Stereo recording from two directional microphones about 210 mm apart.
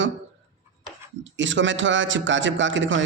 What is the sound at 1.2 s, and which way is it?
A man's voice, 60° right (ahead or behind).